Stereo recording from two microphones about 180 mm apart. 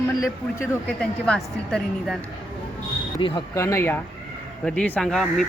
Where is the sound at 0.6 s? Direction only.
5° left (ahead or behind).